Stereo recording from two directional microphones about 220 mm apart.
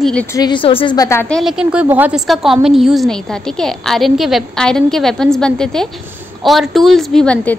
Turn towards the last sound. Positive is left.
turn(degrees=5)  # may be behind; listen again after turning